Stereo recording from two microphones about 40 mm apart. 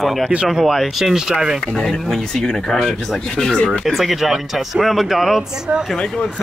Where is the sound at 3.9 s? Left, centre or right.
Centre.